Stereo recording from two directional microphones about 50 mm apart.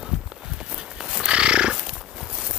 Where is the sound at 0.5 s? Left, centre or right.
Centre.